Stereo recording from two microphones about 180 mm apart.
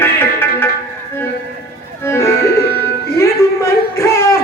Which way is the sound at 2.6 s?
60° left (ahead or behind).